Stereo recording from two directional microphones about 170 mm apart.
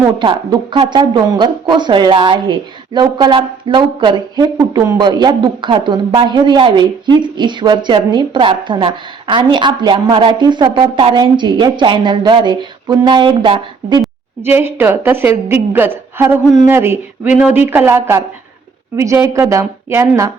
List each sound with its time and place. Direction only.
0.2 s a woman's voice: 30° right (ahead or behind)
14.4 s a woman's voice: 10° right (ahead or behind)